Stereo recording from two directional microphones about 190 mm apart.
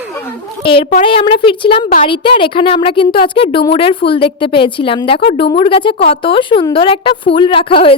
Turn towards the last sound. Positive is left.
turn(degrees=30)  # may be behind; listen again after turning